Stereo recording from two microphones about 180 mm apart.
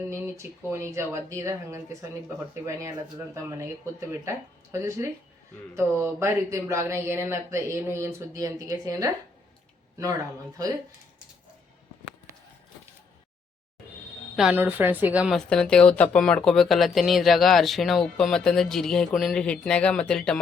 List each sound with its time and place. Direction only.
0.3 s speech: 15° right (ahead or behind)
14.3 s speech: 5° right (ahead or behind)
15.4 s speech: 5° left (ahead or behind)